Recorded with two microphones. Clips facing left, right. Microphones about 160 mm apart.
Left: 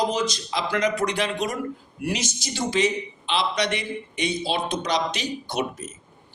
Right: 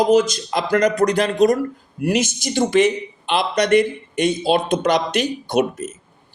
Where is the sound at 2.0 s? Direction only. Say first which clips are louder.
Right 8 dB; 50° right (ahead or behind).